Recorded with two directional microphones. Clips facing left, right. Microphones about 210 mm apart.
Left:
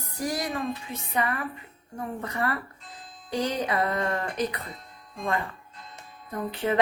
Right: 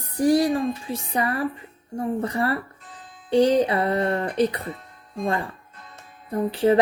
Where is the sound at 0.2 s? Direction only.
30° right (ahead or behind).